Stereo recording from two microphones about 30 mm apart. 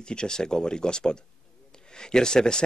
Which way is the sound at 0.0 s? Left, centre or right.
Left.